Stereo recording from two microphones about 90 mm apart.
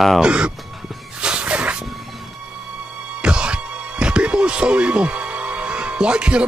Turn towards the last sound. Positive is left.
turn(degrees=-10)  # may be behind; listen again after turning